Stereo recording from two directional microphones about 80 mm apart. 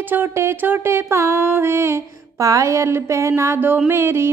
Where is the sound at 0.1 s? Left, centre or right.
Right.